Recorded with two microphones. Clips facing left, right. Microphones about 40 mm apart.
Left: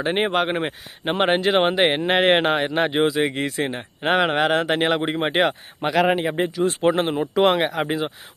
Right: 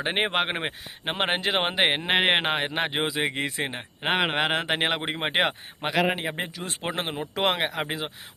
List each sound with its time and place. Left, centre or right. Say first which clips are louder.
0.0 s speech: left 4 dB; centre
1.0 s speech: left 7 dB; centre